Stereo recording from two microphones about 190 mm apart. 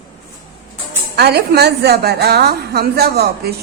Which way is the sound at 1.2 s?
60° right (ahead or behind).